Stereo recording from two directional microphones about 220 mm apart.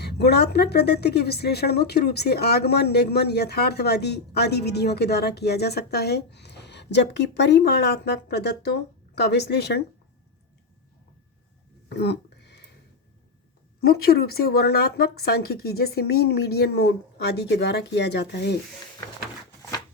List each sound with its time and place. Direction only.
0.0 s a woman's voice: 50° left (ahead or behind)
11.9 s a sound: 50° left (ahead or behind)
13.8 s a woman's voice: 45° left (ahead or behind)